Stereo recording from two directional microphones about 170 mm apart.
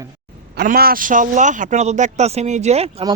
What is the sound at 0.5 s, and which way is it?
A man's voice, 65° right (ahead or behind).